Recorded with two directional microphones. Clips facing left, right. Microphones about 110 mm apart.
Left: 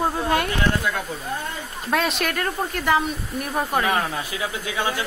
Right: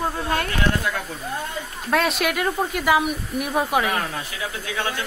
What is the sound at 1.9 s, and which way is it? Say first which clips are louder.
Speech: right 2 dB; centre (ahead or behind).